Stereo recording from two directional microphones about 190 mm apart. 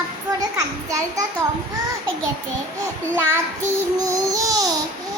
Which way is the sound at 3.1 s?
15° right (ahead or behind).